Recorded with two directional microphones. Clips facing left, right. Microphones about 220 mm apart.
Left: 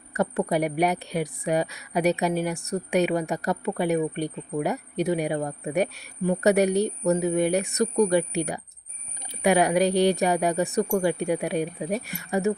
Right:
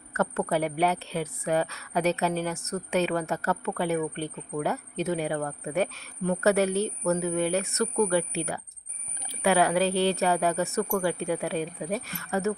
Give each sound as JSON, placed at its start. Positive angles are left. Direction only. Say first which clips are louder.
{"t": 0.1, "sound": "a woman's voice", "louder": "left 2 dB", "side_deg": 15}